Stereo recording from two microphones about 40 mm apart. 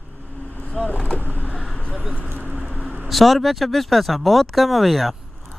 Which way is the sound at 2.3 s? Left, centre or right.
Right.